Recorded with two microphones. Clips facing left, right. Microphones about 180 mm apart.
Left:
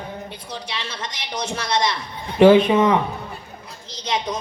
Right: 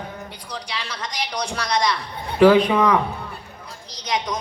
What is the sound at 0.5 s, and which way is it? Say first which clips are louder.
A man's voice: right 1 dB; 25° left (ahead or behind).